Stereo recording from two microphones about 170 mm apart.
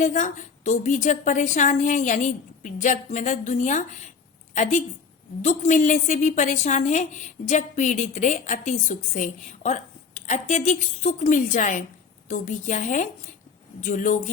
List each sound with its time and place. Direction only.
0.0 s a woman's voice: 45° left (ahead or behind)